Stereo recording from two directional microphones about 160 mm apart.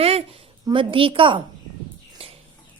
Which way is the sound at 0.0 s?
40° right (ahead or behind).